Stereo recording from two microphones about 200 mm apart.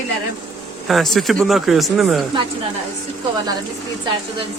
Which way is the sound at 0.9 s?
Centre (ahead or behind).